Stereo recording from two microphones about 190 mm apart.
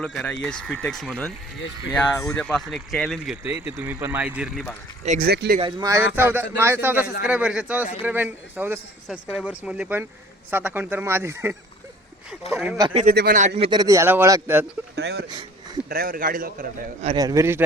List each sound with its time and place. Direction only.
0.0 s speech: 5° left (ahead or behind)
5.0 s speech: 40° right (ahead or behind)
5.3 s speech: 55° right (ahead or behind)
5.5 s a man's voice: 20° right (ahead or behind); by 12.7 s 5° right (ahead or behind)
13.1 s a man's voice: 50° right (ahead or behind)
13.6 s a man's voice: 25° right (ahead or behind)
14.9 s speech: 60° right (ahead or behind)
15.3 s a sound: 20° right (ahead or behind)
15.9 s a man's voice: 50° right (ahead or behind)
17.2 s a man's voice: 15° right (ahead or behind)